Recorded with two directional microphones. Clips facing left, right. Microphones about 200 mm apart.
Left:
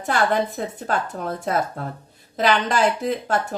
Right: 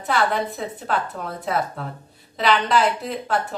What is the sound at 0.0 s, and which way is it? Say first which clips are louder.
Speech: left 1 dB; 45° left (ahead or behind).